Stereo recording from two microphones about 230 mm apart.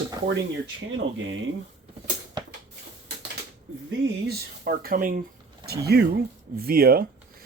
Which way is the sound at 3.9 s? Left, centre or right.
Right.